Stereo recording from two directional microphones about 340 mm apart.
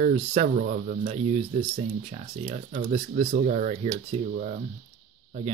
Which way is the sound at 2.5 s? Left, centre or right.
Centre.